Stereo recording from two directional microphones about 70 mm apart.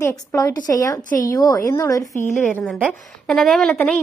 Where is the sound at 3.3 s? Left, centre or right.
Centre.